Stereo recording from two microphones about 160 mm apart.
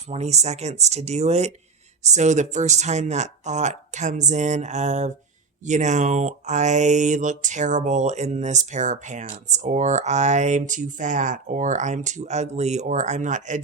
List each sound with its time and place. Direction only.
0.1 s speech: 45° right (ahead or behind)